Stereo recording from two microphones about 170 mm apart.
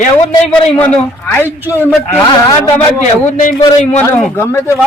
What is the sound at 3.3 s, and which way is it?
Speech, 45° left (ahead or behind).